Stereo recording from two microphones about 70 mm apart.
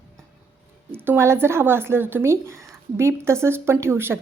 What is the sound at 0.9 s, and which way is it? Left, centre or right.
Speech, right.